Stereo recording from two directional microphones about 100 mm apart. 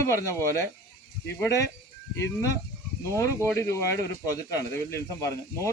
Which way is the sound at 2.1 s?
30° left (ahead or behind).